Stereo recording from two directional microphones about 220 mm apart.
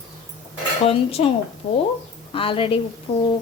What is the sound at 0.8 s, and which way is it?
Speech, 25° left (ahead or behind).